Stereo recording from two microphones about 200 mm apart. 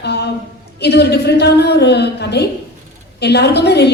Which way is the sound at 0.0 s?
55° left (ahead or behind).